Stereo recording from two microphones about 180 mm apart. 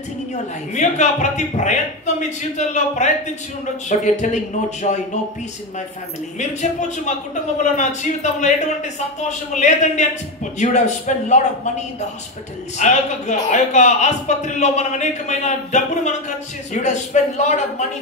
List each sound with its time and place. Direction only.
0.7 s a man's voice: 40° left (ahead or behind)
7.7 s a man's voice: 40° left (ahead or behind)
12.7 s a man's voice: 40° left (ahead or behind)